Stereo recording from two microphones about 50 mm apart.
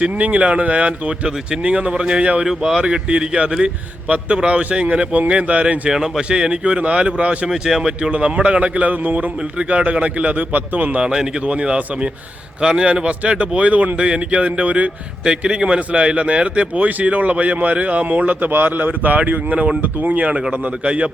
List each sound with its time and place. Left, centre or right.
0.0 s speech: right
2.4 s speech: centre
2.9 s speech: right
5.9 s speech: centre
7.5 s speech: centre
8.1 s speech: right
11.0 s speech: centre